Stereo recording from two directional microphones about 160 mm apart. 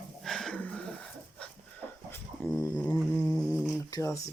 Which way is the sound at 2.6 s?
10° left (ahead or behind).